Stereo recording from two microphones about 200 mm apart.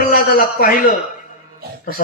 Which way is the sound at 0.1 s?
45° left (ahead or behind).